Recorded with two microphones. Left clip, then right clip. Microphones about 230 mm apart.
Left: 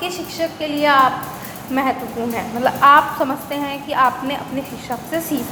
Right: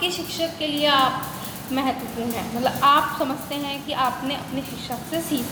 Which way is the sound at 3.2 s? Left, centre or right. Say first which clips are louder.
Left 5 dB; centre.